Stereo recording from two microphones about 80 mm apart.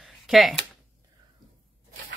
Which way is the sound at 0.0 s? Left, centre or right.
Centre.